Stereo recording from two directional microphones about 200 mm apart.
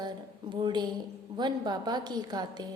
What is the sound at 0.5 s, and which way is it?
A woman's voice, 20° right (ahead or behind).